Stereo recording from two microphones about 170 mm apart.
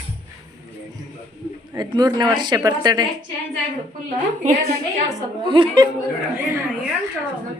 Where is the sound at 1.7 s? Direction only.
25° right (ahead or behind).